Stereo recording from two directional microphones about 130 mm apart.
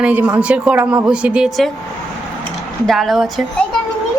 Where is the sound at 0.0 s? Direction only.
10° right (ahead or behind).